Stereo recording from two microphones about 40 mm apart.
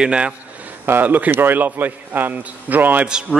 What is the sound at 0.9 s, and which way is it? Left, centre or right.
A man's voice, right.